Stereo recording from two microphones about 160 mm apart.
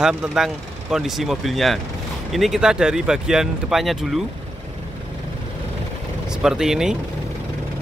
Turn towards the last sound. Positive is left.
turn(degrees=-5)  # may be behind; listen again after turning